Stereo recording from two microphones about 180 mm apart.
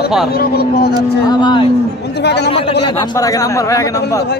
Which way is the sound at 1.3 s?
25° left (ahead or behind).